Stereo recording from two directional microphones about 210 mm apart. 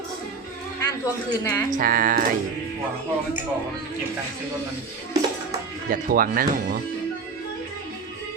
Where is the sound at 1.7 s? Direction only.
40° right (ahead or behind).